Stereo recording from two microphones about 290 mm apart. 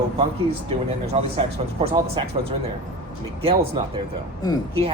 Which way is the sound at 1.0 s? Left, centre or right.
Right.